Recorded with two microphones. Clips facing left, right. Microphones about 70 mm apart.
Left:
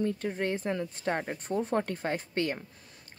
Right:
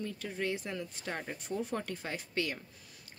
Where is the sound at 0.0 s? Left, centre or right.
Left.